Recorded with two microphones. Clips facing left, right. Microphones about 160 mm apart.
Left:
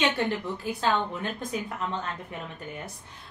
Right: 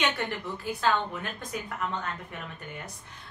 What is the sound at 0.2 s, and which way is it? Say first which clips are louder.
Speech: left 4 dB; 30° left (ahead or behind).